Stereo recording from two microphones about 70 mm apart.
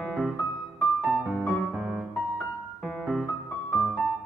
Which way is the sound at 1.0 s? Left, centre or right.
Centre.